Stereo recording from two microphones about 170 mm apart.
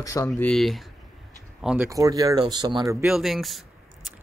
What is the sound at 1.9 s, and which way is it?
Speech, 20° right (ahead or behind).